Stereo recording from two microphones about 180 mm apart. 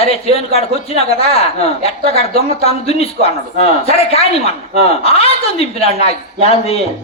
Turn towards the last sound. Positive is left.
turn(degrees=35)  # may be behind; listen again after turning